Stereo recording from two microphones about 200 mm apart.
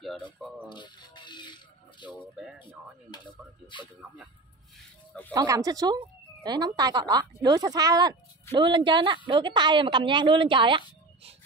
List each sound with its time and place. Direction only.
0.7 s a sound: 20° left (ahead or behind)
3.6 s music: 25° left (ahead or behind)
5.3 s speech: 15° right (ahead or behind)